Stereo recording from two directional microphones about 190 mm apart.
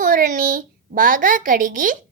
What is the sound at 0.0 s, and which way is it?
A woman's voice, 45° right (ahead or behind).